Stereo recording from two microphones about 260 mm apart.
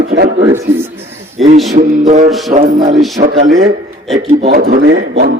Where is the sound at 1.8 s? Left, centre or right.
Right.